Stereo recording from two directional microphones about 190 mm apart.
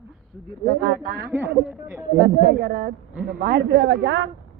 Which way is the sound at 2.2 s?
55° right (ahead or behind).